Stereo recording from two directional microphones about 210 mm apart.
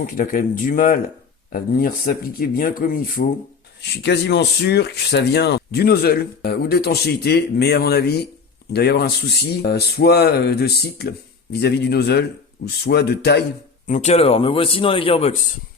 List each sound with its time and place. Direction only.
0.0 s speech: 40° left (ahead or behind)
3.8 s speech: 55° left (ahead or behind)
13.8 s speech: 35° left (ahead or behind)